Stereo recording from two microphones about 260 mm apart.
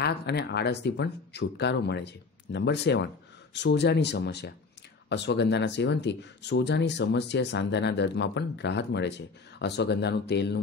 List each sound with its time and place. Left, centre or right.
0.0 s speech: left